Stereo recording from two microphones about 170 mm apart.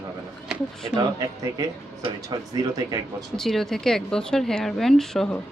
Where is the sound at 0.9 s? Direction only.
25° right (ahead or behind).